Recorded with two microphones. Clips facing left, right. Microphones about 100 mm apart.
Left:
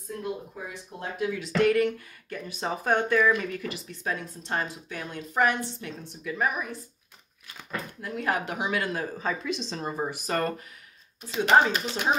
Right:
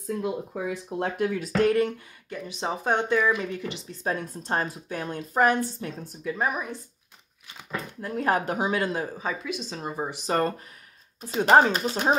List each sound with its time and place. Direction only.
0.6 s speech: 85° right; by 2.0 s 30° right (ahead or behind)
2.2 s speech: 20° right (ahead or behind)
8.0 s speech: 35° right (ahead or behind)
9.0 s speech: 10° right (ahead or behind)
11.1 s speech: 40° right (ahead or behind)